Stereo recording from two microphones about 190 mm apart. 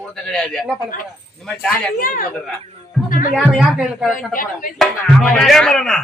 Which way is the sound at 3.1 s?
45° left (ahead or behind).